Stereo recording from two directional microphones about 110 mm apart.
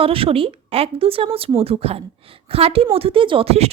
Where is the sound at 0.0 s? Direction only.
55° right (ahead or behind).